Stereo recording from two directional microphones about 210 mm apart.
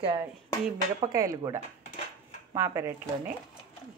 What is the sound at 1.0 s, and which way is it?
A woman's voice, 15° right (ahead or behind).